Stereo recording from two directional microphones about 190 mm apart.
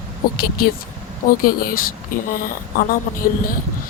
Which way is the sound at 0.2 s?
50° left (ahead or behind).